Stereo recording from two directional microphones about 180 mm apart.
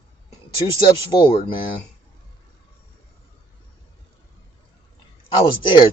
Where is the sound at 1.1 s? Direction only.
25° left (ahead or behind).